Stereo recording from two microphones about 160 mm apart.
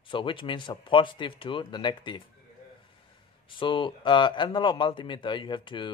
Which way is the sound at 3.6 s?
30° left (ahead or behind).